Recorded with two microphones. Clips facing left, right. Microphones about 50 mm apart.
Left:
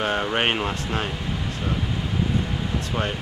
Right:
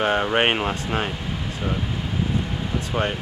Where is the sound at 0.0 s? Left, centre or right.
Centre.